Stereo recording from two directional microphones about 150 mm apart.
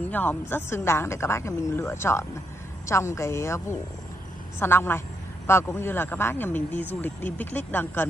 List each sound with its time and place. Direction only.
0.1 s speech: 10° left (ahead or behind)